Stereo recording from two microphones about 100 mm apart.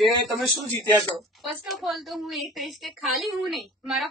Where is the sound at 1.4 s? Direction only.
Centre (ahead or behind).